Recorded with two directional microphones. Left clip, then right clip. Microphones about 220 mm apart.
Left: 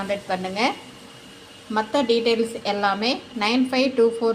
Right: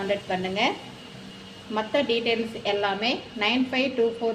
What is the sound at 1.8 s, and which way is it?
A woman's voice, 30° left (ahead or behind).